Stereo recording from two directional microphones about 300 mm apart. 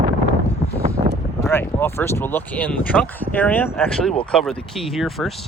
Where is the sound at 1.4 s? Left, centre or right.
Centre.